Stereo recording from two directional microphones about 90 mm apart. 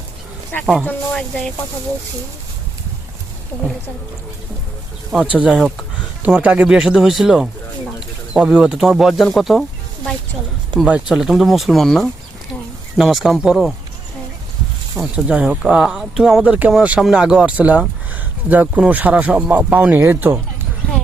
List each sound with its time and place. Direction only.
0.6 s speech: 5° right (ahead or behind)
1.1 s speech: 10° left (ahead or behind)
5.1 s speech: 10° right (ahead or behind)
10.7 s speech: 55° right (ahead or behind)
11.1 s speech: 5° right (ahead or behind)
15.0 s speech: 15° right (ahead or behind)